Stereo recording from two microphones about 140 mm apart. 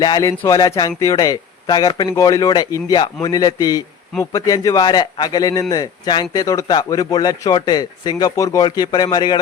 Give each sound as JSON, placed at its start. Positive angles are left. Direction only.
{"t": 0.0, "sound": "speech", "side_deg": 25}